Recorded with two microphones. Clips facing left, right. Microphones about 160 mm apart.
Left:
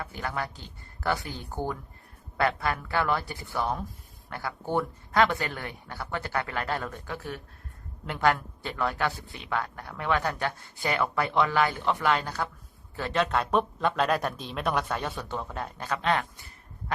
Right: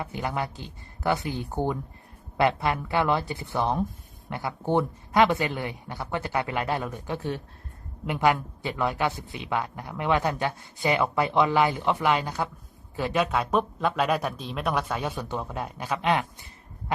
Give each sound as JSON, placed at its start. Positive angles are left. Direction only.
{"t": 0.0, "sound": "speech", "side_deg": -20}
{"t": 7.2, "sound": "speech", "side_deg": -25}
{"t": 8.0, "sound": "speech", "side_deg": -15}
{"t": 15.1, "sound": "speech", "side_deg": -15}